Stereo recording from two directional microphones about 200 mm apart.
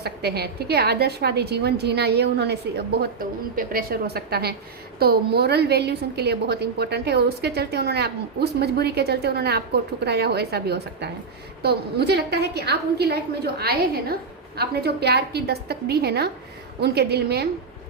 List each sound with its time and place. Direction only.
0.0 s a woman's voice: 55° right (ahead or behind)